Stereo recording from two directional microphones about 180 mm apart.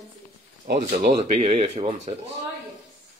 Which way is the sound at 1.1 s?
30° right (ahead or behind).